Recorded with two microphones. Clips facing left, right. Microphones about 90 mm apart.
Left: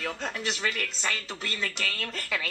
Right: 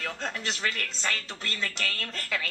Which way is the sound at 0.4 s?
15° left (ahead or behind).